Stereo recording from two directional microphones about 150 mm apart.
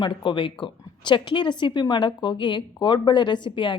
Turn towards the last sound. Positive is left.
turn(degrees=30)  # may be behind; listen again after turning